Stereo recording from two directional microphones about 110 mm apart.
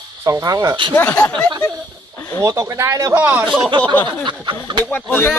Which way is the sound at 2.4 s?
25° right (ahead or behind).